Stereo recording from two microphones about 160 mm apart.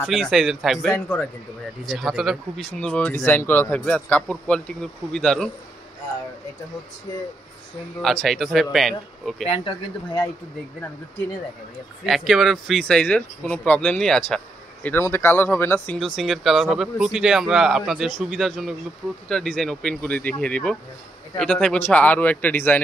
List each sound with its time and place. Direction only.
0.0 s speech: centre (ahead or behind)
0.9 s a man's voice: 15° left (ahead or behind)
1.9 s a man's voice: centre (ahead or behind)
8.0 s speech: centre (ahead or behind)
9.5 s speech: 35° left (ahead or behind)
12.1 s a man's voice: centre (ahead or behind)
16.0 s a man's voice: centre (ahead or behind)